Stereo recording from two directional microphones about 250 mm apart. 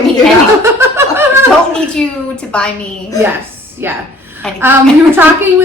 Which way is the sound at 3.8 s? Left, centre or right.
Centre.